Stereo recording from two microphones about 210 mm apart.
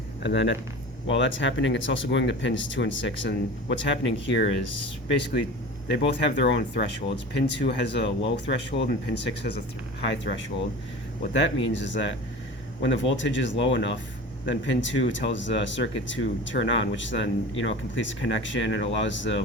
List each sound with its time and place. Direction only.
0.2 s speech: 60° left (ahead or behind)
6.4 s speech: 55° left (ahead or behind)